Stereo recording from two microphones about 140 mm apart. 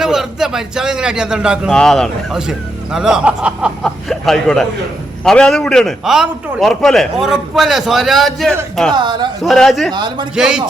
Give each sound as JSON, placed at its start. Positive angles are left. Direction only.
{"t": 0.0, "sound": "a man's voice", "side_deg": -5}
{"t": 8.9, "sound": "speech", "side_deg": -30}
{"t": 9.4, "sound": "a man's voice", "side_deg": 0}
{"t": 9.9, "sound": "speech", "side_deg": -30}
{"t": 10.3, "sound": "a man's voice", "side_deg": -5}